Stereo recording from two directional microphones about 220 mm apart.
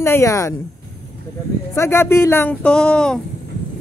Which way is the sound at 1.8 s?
10° left (ahead or behind).